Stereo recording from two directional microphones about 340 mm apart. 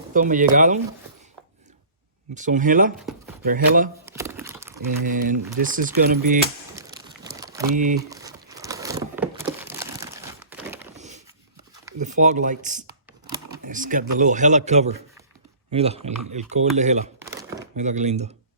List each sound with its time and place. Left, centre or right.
0.1 s speech: right
2.3 s speech: right
4.0 s a sound: centre
5.0 s speech: right
7.3 s a sound: centre
7.7 s speech: right
8.1 s a sound: centre
9.4 s crumpling: centre
10.9 s a sound: centre
11.9 s speech: right
17.2 s chopping: centre
17.7 s speech: right